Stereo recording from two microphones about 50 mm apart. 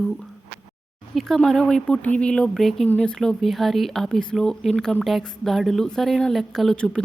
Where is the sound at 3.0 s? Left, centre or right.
Centre.